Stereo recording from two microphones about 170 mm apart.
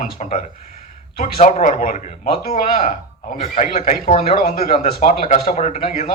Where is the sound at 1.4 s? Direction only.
45° left (ahead or behind).